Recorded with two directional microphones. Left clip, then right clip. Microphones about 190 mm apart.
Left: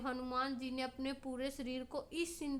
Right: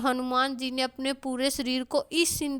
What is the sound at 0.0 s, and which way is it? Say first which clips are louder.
A woman's voice: right 13 dB; 45° right (ahead or behind).